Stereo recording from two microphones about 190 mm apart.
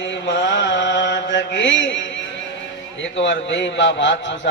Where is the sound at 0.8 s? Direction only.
65° left (ahead or behind).